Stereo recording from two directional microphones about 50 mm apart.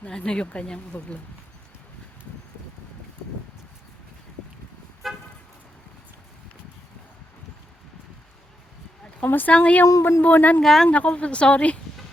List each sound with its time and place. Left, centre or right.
0.0 s speech: centre
5.0 s toot: centre
9.2 s speech: left
9.5 s a woman's voice: left
10.0 s speech: left
10.2 s speech: left
10.6 s speech: centre
10.8 s a woman's voice: left